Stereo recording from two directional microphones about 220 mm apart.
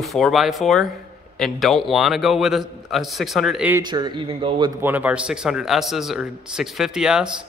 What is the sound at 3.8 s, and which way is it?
Speech, 20° right (ahead or behind).